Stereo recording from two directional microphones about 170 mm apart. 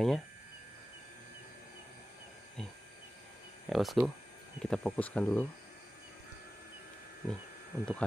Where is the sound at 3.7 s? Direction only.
Centre (ahead or behind).